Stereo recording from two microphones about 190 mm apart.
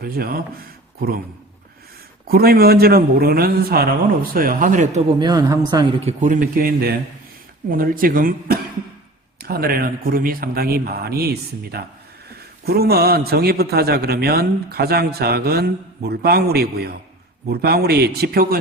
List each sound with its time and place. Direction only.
0.0 s speech: 50° right (ahead or behind)
2.2 s a man's voice: 55° right (ahead or behind)
5.2 s speech: 20° right (ahead or behind)
6.1 s a man's voice: 40° right (ahead or behind)